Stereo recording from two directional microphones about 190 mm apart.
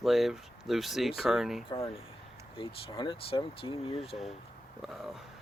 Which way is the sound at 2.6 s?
25° left (ahead or behind).